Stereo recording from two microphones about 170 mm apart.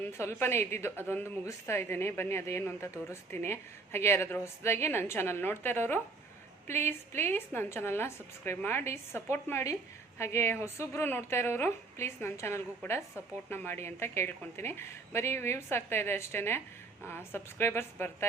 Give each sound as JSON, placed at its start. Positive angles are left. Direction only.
{"t": 0.0, "sound": "a woman's voice", "side_deg": 15}